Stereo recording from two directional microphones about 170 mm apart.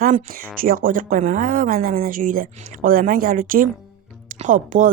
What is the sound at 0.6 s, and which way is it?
Speech, 55° right (ahead or behind).